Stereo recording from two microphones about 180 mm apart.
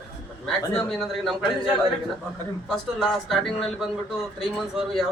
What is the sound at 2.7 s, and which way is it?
Speech, centre (ahead or behind).